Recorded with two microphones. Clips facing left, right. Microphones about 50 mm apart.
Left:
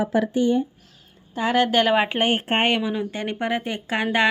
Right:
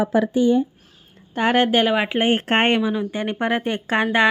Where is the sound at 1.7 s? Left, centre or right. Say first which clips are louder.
Right 1 dB; centre.